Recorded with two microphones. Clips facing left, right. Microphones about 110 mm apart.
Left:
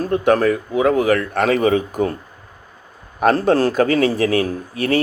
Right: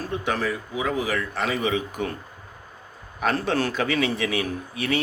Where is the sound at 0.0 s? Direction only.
50° left (ahead or behind).